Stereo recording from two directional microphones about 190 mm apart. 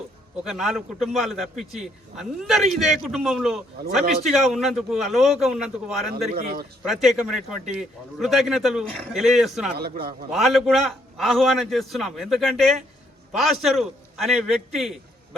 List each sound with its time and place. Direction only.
0.4 s a man's voice: centre (ahead or behind)
6.3 s a man's voice: 50° right (ahead or behind)
6.8 s a man's voice: centre (ahead or behind)
9.7 s a man's voice: 55° right (ahead or behind)
10.3 s a man's voice: centre (ahead or behind)